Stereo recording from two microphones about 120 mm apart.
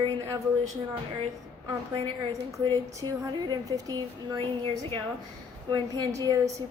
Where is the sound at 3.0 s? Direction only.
35° right (ahead or behind).